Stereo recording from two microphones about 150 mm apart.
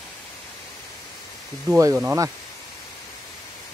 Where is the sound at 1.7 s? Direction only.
20° right (ahead or behind).